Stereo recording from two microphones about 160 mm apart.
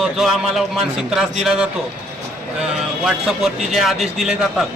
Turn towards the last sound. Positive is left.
turn(degrees=0)  # may be behind; listen again after turning